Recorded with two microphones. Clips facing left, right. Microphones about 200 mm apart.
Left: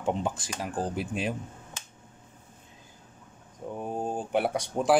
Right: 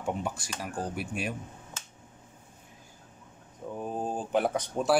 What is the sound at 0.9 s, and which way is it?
Speech, 90° left.